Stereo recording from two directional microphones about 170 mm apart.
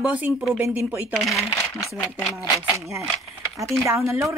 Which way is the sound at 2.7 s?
15° right (ahead or behind).